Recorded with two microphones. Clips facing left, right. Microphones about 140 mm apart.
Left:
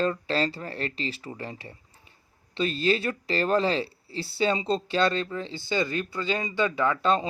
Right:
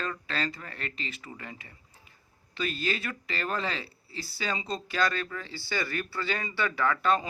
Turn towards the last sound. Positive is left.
turn(degrees=25)  # may be behind; listen again after turning